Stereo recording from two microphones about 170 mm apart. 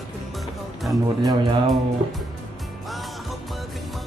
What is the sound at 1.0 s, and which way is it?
Speech, 25° right (ahead or behind).